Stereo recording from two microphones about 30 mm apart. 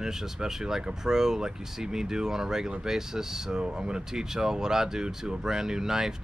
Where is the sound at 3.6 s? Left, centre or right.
Right.